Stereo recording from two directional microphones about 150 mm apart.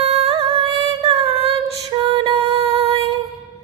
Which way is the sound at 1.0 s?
40° right (ahead or behind).